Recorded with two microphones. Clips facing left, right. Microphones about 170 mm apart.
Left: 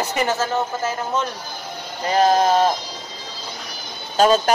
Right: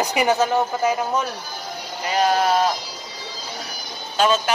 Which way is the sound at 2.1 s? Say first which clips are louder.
Left 3 dB; 35° left (ahead or behind).